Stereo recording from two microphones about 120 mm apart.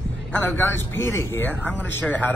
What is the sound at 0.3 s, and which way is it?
Speech, 15° left (ahead or behind).